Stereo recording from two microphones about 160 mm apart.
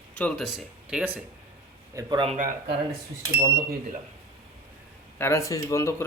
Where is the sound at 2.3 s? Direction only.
40° right (ahead or behind).